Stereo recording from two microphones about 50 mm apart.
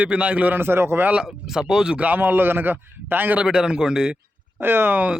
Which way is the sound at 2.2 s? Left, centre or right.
Right.